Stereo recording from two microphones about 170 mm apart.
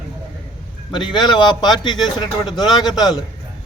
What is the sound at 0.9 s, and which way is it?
Speech, 25° left (ahead or behind).